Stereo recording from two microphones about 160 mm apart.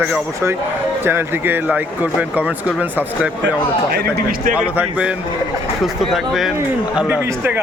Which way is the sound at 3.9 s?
80° right.